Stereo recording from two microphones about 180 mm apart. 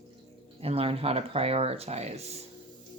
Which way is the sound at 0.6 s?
35° right (ahead or behind).